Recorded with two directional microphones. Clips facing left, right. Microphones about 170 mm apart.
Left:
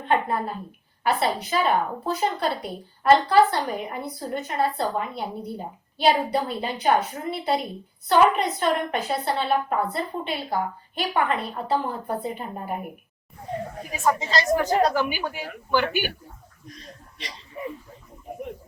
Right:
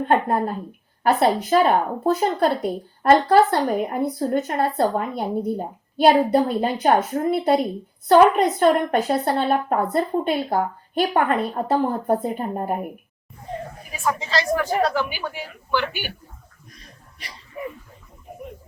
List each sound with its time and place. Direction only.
0.0 s speech: 45° right (ahead or behind)
14.0 s a woman's voice: 15° left (ahead or behind)